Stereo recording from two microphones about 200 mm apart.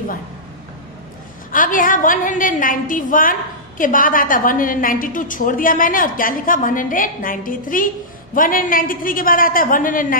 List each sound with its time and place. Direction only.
1.5 s a woman's voice: 40° left (ahead or behind)